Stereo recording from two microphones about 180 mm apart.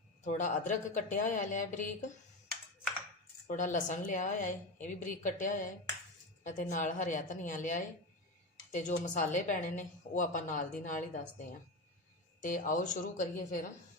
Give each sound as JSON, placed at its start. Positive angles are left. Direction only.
{"t": 0.3, "sound": "a woman's voice", "side_deg": 45}
{"t": 3.4, "sound": "a woman's voice", "side_deg": 45}
{"t": 12.4, "sound": "a woman's voice", "side_deg": 45}